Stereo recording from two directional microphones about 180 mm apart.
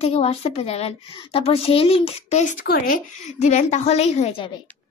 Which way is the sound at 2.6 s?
60° left (ahead or behind).